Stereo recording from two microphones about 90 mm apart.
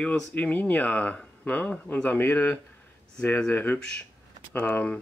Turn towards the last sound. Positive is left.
turn(degrees=15)  # may be behind; listen again after turning